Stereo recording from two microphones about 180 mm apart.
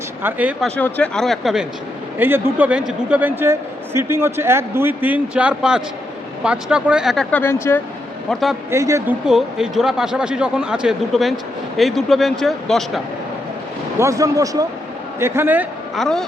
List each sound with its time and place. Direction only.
0.2 s a man's voice: 10° right (ahead or behind)
0.8 s speech: 10° left (ahead or behind)
2.1 s a man's voice: 10° right (ahead or behind); by 7.8 s 15° left (ahead or behind)
8.3 s speech: centre (ahead or behind)
8.7 s a man's voice: 15° right (ahead or behind)
9.2 s speech: centre (ahead or behind)
14.0 s a man's voice: 20° right (ahead or behind)
16.0 s speech: 5° left (ahead or behind)